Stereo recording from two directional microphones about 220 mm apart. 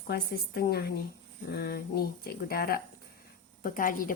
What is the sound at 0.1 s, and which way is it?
Speech, 45° left (ahead or behind).